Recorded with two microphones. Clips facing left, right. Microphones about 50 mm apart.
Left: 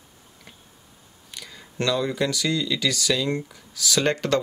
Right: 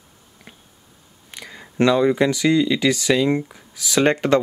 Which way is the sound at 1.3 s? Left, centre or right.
Right.